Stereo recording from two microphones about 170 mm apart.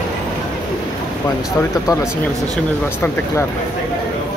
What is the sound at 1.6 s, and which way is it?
Speech, 15° left (ahead or behind).